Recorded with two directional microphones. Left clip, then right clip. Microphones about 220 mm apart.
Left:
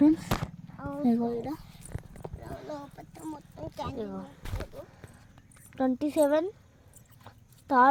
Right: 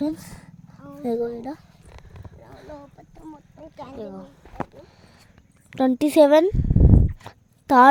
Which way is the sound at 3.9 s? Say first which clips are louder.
Right 2 dB; 15° right (ahead or behind).